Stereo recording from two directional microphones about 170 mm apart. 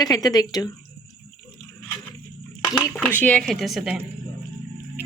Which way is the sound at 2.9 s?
10° left (ahead or behind).